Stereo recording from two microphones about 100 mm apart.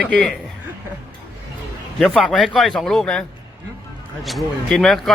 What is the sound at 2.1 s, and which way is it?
Speech, 5° left (ahead or behind).